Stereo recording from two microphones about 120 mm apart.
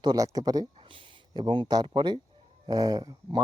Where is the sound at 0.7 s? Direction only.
45° right (ahead or behind).